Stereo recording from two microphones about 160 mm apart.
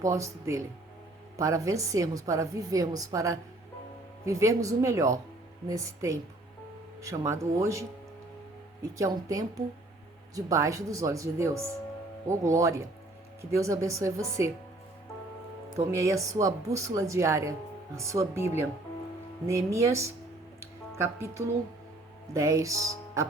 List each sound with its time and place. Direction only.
0.0 s a woman's voice: 20° right (ahead or behind)
9.0 s a woman's voice: 20° right (ahead or behind)
15.9 s a woman's voice: 20° right (ahead or behind)